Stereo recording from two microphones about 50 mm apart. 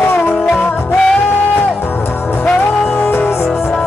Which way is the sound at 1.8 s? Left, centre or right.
Left.